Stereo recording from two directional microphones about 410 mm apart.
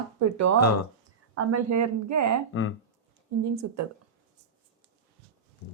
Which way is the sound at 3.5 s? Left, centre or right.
Right.